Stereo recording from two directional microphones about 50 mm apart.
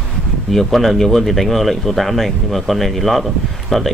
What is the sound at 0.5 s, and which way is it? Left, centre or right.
Speech, centre.